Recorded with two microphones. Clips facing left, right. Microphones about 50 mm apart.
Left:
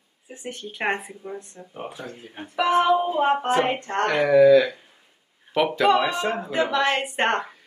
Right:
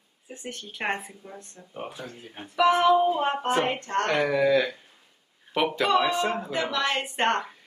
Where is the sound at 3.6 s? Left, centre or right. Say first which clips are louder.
Left 3 dB; left.